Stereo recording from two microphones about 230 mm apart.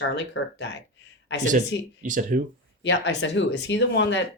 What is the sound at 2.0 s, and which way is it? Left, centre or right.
Speech, right.